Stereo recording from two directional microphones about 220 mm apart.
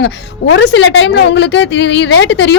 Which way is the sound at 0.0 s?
55° left (ahead or behind).